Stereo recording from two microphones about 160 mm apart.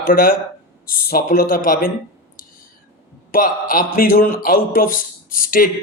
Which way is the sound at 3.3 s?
60° left (ahead or behind).